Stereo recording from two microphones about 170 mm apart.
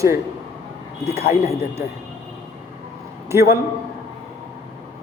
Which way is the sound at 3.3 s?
15° right (ahead or behind).